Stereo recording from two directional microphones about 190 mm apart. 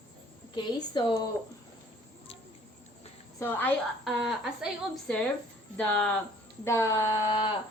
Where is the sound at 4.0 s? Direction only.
Centre (ahead or behind); by 7.5 s 20° left (ahead or behind).